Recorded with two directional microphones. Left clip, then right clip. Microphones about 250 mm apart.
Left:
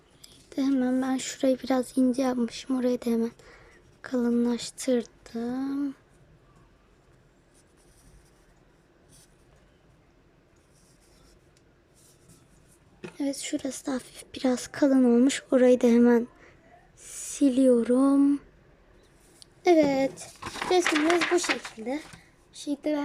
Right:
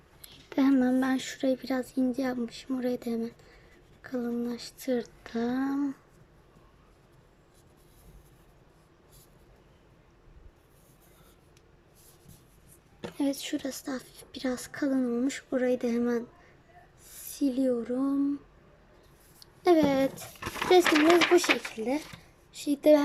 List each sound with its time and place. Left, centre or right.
0.2 s speech: centre
13.0 s a woman's voice: centre
17.4 s speech: centre
19.4 s speech: centre